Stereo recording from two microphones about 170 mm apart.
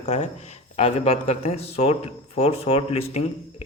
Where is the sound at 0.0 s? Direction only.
45° left (ahead or behind).